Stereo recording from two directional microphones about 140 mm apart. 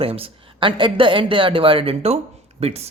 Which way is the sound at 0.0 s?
40° right (ahead or behind).